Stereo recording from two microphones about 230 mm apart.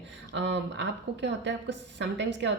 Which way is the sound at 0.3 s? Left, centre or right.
Right.